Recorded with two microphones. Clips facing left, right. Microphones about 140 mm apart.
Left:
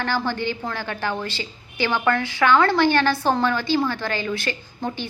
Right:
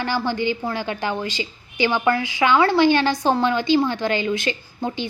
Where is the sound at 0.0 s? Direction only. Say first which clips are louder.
Right 2 dB; 15° right (ahead or behind).